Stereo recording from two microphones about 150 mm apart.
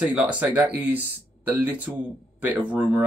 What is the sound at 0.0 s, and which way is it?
Speech, 10° right (ahead or behind).